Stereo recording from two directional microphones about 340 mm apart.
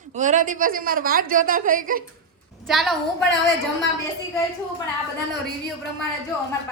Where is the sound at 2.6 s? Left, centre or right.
Centre.